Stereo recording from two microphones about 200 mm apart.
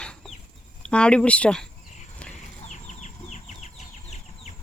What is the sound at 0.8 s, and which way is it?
Speech, 5° left (ahead or behind).